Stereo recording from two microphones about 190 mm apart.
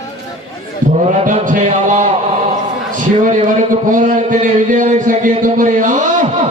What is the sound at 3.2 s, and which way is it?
A man's voice, 40° right (ahead or behind).